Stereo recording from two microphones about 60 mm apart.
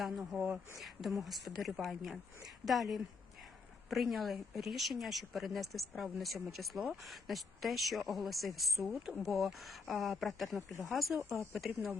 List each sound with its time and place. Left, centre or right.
0.0 s speech: centre
0.3 s speech: right
0.8 s speech: centre